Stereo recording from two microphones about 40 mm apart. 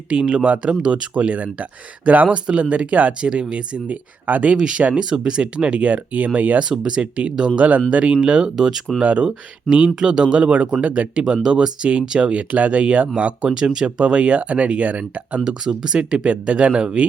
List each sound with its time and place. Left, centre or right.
0.1 s speech: right
4.5 s speech: right
6.6 s speech: right
8.5 s speech: centre
9.0 s speech: right
13.5 s speech: centre
15.4 s speech: centre